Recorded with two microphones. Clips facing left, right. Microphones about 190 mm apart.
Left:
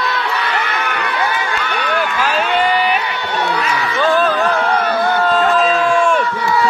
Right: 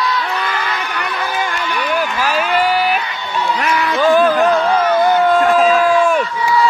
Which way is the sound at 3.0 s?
75° left (ahead or behind).